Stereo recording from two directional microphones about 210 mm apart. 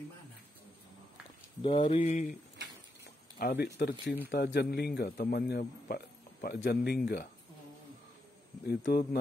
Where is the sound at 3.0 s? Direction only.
50° left (ahead or behind).